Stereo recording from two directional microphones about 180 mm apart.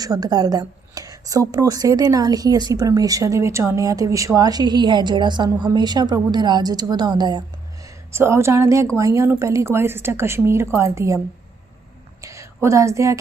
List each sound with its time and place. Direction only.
0.0 s a woman's voice: 20° right (ahead or behind)
12.2 s a sound: 15° right (ahead or behind)
12.6 s a woman's voice: 15° right (ahead or behind)